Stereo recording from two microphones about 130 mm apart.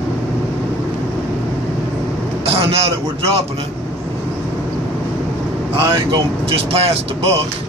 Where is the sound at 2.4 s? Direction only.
50° right (ahead or behind).